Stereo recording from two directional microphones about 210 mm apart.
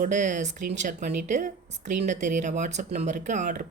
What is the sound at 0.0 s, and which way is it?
Speech, 35° right (ahead or behind).